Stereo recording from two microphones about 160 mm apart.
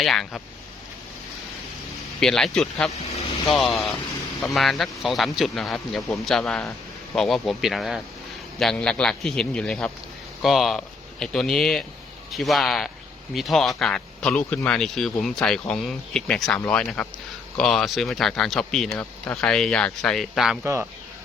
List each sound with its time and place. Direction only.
0.0 s speech: centre (ahead or behind)
2.2 s speech: 5° left (ahead or behind)
3.0 s speech: 40° left (ahead or behind)
3.5 s speech: centre (ahead or behind)